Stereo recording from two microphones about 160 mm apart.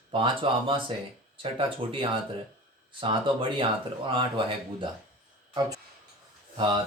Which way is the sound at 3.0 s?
30° right (ahead or behind).